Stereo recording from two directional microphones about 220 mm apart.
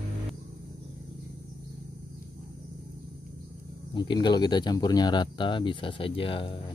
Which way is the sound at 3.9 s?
20° left (ahead or behind).